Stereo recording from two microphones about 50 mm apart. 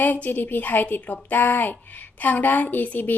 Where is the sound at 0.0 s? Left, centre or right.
Left.